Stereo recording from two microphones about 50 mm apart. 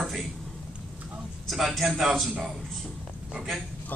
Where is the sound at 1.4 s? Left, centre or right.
Centre.